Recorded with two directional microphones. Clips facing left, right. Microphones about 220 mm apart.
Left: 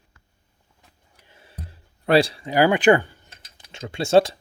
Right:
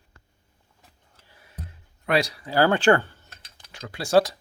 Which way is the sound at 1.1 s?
25° left (ahead or behind).